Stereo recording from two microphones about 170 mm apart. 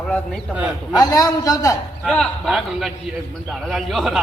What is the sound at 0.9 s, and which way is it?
Speech, 20° left (ahead or behind).